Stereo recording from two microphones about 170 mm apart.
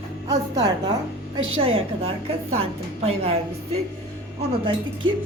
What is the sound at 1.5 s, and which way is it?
A woman's voice, 35° right (ahead or behind).